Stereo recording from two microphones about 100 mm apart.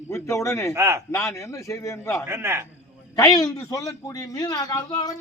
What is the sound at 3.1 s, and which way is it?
A man's voice, 40° left (ahead or behind).